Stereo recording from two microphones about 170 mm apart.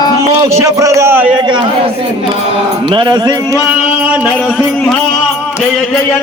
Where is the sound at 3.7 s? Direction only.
10° right (ahead or behind).